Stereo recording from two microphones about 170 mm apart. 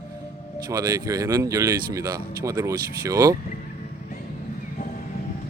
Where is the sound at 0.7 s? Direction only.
20° right (ahead or behind).